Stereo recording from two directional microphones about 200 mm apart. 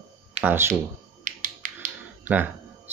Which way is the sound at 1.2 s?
40° right (ahead or behind).